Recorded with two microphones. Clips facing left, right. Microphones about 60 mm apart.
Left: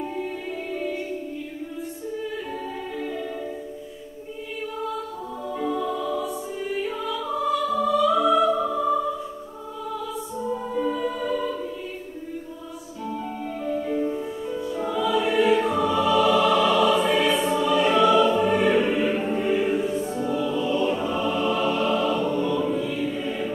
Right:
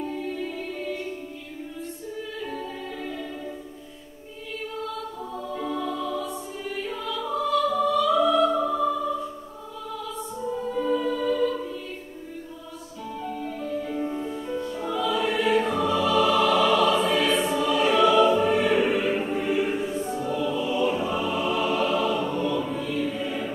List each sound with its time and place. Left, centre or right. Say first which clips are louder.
0.0 s music: even; centre
2.4 s music: left 1 dB; centre
5.5 s music: left 4 dB; centre
10.5 s music: right 1 dB; centre
13.0 s music: left 2 dB; centre
22.4 s choir: left 3 dB; centre